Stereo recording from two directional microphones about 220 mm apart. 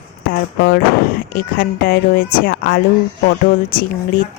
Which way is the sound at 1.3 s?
40° left (ahead or behind).